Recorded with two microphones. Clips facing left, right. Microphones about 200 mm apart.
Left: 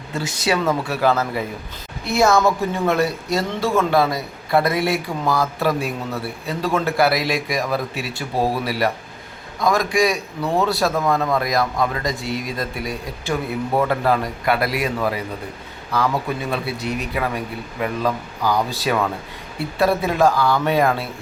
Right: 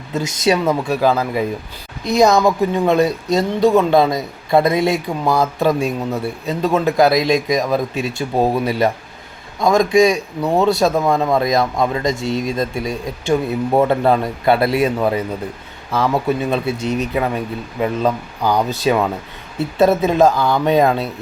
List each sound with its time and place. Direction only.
0.1 s speech: 20° right (ahead or behind)
16.5 s speech: 20° right (ahead or behind)